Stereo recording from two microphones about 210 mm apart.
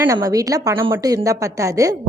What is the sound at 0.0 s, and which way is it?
A woman's voice, 15° right (ahead or behind).